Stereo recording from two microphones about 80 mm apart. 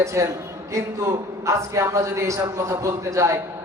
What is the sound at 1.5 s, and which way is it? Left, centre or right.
A man's voice, right.